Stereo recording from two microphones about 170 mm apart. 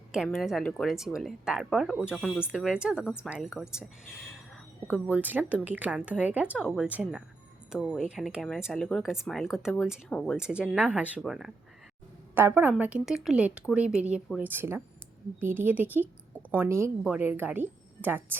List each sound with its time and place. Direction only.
0.1 s speech: 5° right (ahead or behind)
5.0 s speech: 10° right (ahead or behind)
10.1 s speech: 10° left (ahead or behind)
10.3 s speech: 5° right (ahead or behind)
12.3 s a woman's voice: 15° right (ahead or behind)